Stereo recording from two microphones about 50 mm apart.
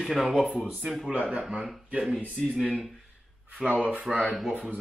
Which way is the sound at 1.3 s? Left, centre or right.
Centre.